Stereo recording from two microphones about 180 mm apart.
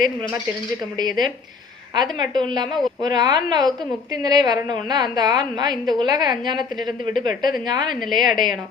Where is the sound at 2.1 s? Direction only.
25° right (ahead or behind).